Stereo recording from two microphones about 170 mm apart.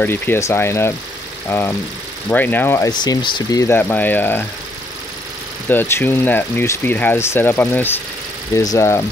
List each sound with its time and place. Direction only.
0.0 s speech: 15° left (ahead or behind)
2.9 s speech: 25° left (ahead or behind)
3.6 s speech: 10° left (ahead or behind)
5.7 s speech: 15° left (ahead or behind)